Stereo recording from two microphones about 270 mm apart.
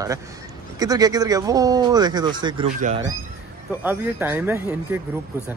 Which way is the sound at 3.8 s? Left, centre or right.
Centre.